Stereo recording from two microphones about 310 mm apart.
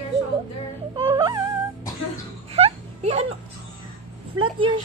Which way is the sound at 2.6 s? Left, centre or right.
Right.